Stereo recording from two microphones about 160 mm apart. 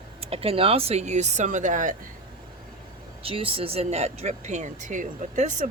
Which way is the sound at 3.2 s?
35° right (ahead or behind).